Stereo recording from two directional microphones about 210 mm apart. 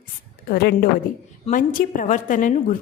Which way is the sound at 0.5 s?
50° left (ahead or behind).